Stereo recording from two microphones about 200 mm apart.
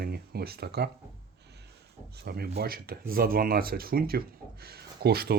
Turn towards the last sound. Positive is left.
turn(degrees=-50)  # may be behind; listen again after turning